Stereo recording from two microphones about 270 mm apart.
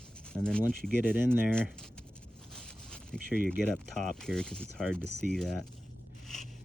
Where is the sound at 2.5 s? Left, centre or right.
Centre.